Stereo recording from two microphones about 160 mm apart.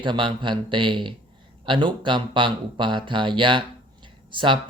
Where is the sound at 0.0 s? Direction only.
30° right (ahead or behind).